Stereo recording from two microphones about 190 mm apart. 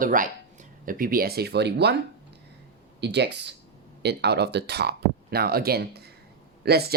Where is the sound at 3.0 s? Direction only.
65° right (ahead or behind).